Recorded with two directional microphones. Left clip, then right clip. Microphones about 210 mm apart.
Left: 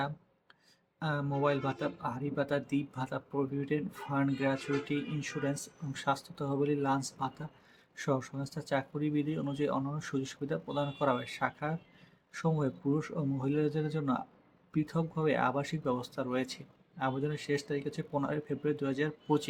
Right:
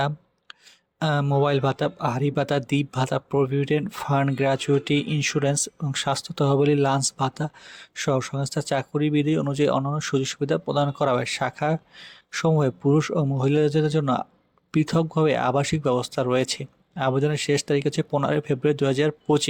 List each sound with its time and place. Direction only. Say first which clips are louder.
0.9 s speech: right 12 dB; 45° right (ahead or behind)